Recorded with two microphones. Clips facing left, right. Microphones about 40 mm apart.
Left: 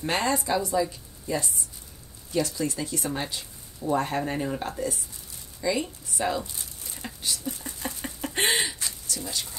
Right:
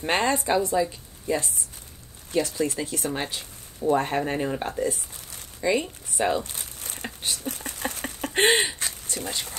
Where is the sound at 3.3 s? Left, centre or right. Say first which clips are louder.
Right 1 dB; right.